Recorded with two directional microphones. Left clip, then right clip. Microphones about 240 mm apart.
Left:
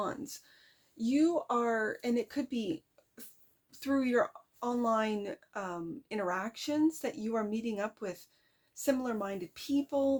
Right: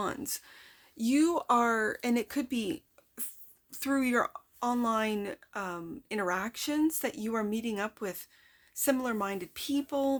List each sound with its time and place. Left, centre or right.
0.0 s speech: right